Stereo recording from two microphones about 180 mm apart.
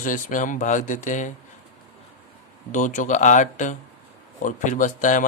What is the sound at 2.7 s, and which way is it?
Speech, 45° left (ahead or behind).